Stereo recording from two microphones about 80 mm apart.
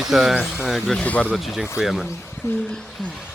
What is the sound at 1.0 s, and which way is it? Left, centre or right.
Speech, centre.